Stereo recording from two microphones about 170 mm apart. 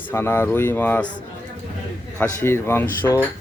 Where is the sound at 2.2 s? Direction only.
15° left (ahead or behind).